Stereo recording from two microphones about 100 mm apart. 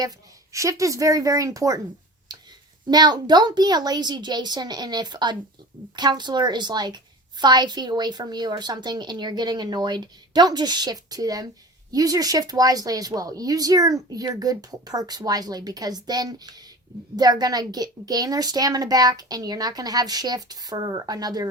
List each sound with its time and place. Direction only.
0.5 s speech: 30° right (ahead or behind)
2.3 s a sound: 45° right (ahead or behind)
2.9 s a woman's voice: 45° right (ahead or behind)